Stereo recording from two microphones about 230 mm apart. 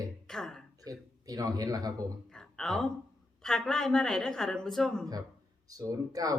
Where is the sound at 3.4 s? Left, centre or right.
Centre.